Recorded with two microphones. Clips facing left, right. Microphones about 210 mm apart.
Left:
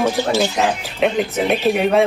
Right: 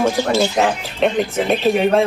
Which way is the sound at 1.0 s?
Centre (ahead or behind).